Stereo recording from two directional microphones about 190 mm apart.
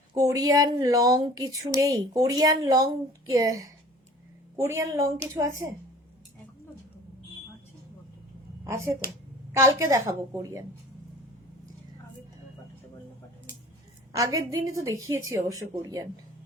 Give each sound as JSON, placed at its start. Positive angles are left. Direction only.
{"t": 0.1, "sound": "a woman's voice", "side_deg": -20}
{"t": 9.5, "sound": "a woman's voice", "side_deg": -15}
{"t": 14.1, "sound": "a woman's voice", "side_deg": -20}